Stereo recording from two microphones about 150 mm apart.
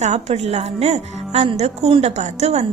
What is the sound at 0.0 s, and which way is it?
A woman's voice, 50° right (ahead or behind).